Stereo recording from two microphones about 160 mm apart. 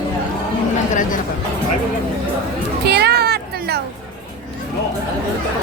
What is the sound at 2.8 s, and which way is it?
Music, 90° right.